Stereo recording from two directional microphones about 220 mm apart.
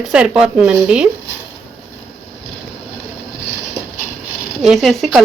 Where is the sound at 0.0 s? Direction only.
5° right (ahead or behind).